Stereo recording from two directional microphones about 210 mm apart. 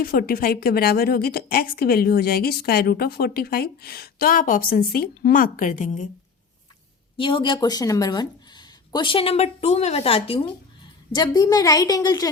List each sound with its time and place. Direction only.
0.0 s a woman's voice: 45° left (ahead or behind)
7.2 s a woman's voice: 25° left (ahead or behind)